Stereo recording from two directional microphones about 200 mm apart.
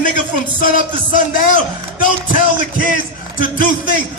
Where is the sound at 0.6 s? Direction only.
40° left (ahead or behind).